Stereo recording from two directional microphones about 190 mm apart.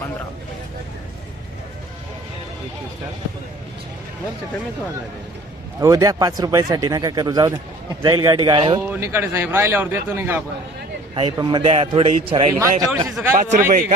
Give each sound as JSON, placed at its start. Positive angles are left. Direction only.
{"t": 5.8, "sound": "speech", "side_deg": -20}
{"t": 8.8, "sound": "speech", "side_deg": -15}
{"t": 11.1, "sound": "speech", "side_deg": -25}
{"t": 12.5, "sound": "speech", "side_deg": -15}
{"t": 13.3, "sound": "a man's voice", "side_deg": -45}